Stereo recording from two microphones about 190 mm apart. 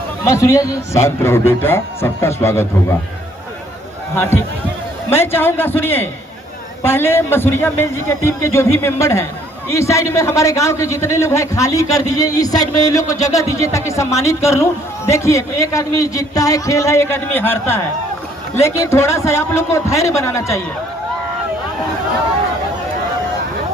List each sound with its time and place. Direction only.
0.3 s a man's voice: 15° left (ahead or behind)
5.1 s a man's voice: 10° left (ahead or behind)